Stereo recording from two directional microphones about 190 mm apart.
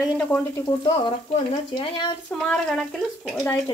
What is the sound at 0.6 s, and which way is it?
Speech, 25° left (ahead or behind).